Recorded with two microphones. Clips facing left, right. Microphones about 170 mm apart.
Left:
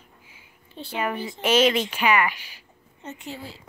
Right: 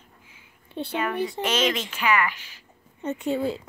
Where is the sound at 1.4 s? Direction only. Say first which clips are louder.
Left 8 dB; 10° left (ahead or behind).